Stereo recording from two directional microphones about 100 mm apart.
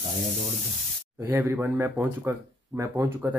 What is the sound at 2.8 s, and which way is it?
Speech, 20° right (ahead or behind).